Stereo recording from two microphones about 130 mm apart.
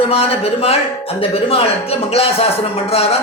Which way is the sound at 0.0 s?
50° left (ahead or behind).